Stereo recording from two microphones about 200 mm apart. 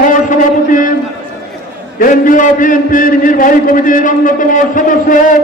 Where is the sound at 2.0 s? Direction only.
40° left (ahead or behind).